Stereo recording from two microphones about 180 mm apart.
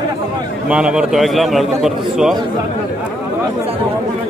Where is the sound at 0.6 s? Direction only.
5° right (ahead or behind).